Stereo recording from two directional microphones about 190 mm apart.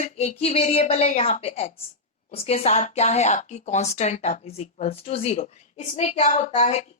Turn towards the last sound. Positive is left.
turn(degrees=35)  # may be behind; listen again after turning